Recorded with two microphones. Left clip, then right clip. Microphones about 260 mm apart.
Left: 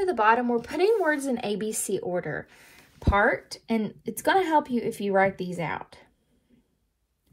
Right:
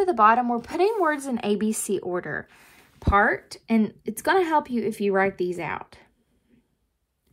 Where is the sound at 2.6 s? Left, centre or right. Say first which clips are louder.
Even; right.